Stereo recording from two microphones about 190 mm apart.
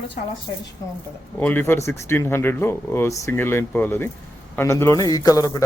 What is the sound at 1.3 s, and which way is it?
Speech, 10° left (ahead or behind).